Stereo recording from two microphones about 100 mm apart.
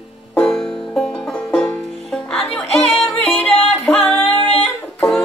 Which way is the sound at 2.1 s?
5° left (ahead or behind).